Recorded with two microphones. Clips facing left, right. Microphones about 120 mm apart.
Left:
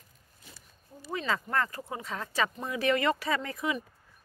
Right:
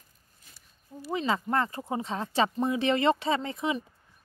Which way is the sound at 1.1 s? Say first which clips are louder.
Right 3 dB; 20° right (ahead or behind).